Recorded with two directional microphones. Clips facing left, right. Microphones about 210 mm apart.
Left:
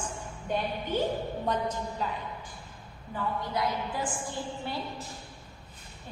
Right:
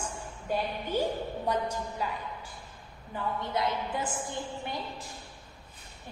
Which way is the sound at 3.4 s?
25° right (ahead or behind).